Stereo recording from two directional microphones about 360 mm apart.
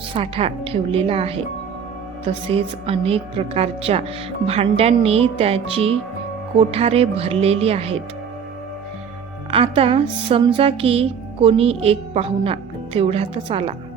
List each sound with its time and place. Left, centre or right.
0.1 s a woman's voice: centre
9.5 s a woman's voice: centre